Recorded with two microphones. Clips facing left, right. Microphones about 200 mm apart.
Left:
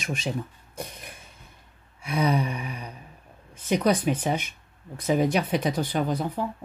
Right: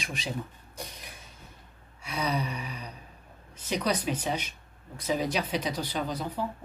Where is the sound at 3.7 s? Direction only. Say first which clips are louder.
Left 6 dB; 50° left (ahead or behind).